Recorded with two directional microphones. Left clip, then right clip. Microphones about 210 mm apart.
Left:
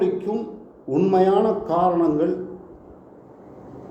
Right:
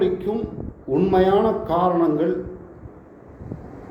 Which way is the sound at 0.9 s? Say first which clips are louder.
Even; 5° left (ahead or behind).